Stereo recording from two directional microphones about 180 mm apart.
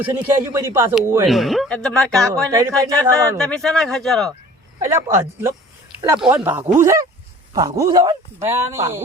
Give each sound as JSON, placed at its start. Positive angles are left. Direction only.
{"t": 0.0, "sound": "speech", "side_deg": -15}
{"t": 1.3, "sound": "speech", "side_deg": 0}
{"t": 2.5, "sound": "speech", "side_deg": -15}
{"t": 2.9, "sound": "speech", "side_deg": 5}
{"t": 4.8, "sound": "speech", "side_deg": -15}